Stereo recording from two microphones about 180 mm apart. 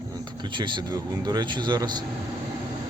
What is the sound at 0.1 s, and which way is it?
Speech, 25° right (ahead or behind).